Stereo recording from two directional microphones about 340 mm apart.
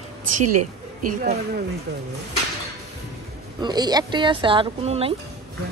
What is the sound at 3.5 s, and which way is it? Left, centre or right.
Speech, centre.